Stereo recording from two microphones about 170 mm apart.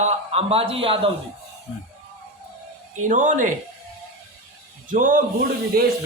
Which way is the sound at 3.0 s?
45° right (ahead or behind).